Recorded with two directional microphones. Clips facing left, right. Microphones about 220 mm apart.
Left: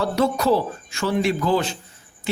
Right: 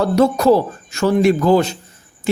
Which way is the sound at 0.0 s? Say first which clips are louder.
Right 7 dB; 45° right (ahead or behind).